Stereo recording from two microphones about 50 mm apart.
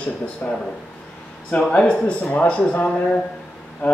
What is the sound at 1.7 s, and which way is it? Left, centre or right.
Speech, centre.